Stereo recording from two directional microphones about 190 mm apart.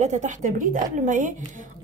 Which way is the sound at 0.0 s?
40° right (ahead or behind).